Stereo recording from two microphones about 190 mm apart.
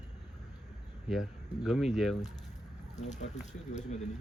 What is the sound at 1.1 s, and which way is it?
Speech, centre (ahead or behind).